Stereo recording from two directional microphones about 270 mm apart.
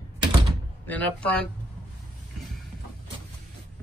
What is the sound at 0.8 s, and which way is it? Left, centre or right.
Speech, centre.